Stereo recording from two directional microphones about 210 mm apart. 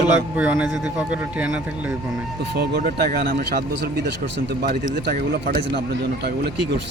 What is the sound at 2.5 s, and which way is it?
Speech, 50° right (ahead or behind).